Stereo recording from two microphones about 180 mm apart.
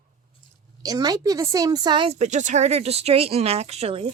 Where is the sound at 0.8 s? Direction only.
20° right (ahead or behind).